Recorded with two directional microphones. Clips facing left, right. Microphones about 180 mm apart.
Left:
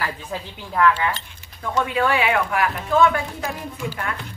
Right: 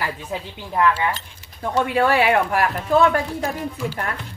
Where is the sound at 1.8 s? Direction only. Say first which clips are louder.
Right 3 dB; 40° right (ahead or behind).